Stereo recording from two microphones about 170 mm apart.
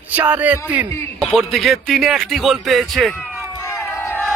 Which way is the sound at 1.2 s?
Centre (ahead or behind).